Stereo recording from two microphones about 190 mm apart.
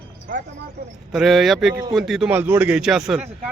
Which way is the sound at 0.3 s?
50° right (ahead or behind).